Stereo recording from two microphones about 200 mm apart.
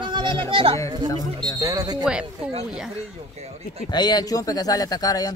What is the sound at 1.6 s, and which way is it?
Speech, 20° right (ahead or behind).